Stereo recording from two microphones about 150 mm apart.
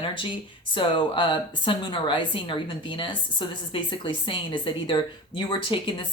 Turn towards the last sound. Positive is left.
turn(degrees=35)  # may be behind; listen again after turning